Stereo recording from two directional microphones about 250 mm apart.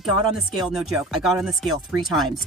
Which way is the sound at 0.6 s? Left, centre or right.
Centre.